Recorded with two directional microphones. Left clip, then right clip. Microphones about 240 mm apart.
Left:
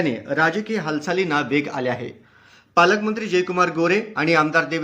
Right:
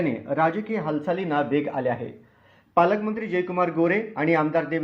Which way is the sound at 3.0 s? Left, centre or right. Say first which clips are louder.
Left 5 dB; centre.